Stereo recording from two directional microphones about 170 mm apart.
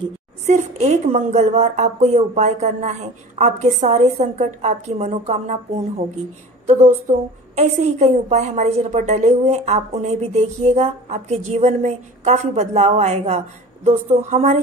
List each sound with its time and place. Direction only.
0.5 s a woman's voice: 45° right (ahead or behind)
6.6 s a woman's voice: 45° right (ahead or behind)